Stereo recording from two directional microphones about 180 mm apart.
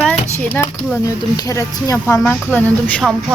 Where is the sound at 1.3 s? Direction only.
20° left (ahead or behind).